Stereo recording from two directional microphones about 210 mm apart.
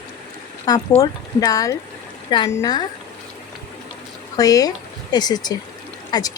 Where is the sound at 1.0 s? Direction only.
15° left (ahead or behind).